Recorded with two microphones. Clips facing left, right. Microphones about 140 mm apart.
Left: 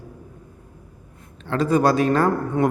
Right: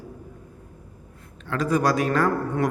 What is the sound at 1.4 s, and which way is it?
A man's voice, 30° left (ahead or behind).